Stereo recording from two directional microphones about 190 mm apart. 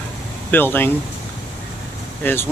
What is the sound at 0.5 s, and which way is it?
Speech, 10° left (ahead or behind).